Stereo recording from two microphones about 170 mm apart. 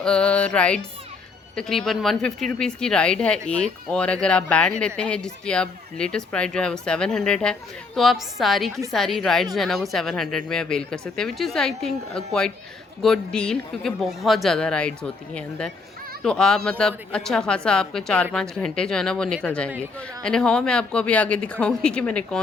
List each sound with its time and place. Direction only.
0.0 s speech: 5° left (ahead or behind)